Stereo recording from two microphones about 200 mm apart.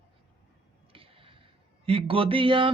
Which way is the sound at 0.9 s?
25° right (ahead or behind).